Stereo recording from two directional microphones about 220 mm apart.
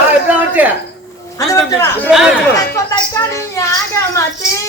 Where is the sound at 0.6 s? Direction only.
10° right (ahead or behind).